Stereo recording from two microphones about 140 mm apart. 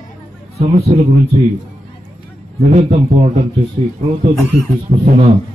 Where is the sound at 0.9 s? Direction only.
50° right (ahead or behind).